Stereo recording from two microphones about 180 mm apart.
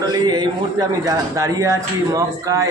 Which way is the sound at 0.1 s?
25° right (ahead or behind).